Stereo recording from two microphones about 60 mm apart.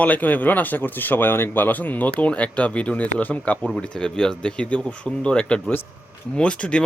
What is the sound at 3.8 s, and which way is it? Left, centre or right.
Speech, centre.